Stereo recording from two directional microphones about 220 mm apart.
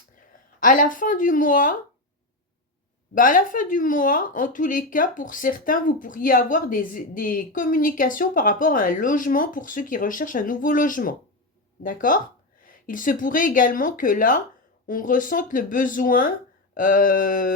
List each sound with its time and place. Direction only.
0.6 s speech: 40° left (ahead or behind)
3.2 s speech: 35° left (ahead or behind)